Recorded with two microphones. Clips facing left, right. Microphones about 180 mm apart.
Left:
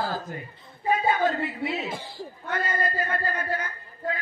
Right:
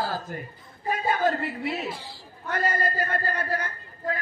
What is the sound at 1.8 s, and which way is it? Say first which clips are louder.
Speech: left 1 dB; 50° left (ahead or behind).